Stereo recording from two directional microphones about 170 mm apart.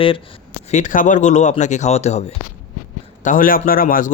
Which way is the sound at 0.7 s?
50° left (ahead or behind).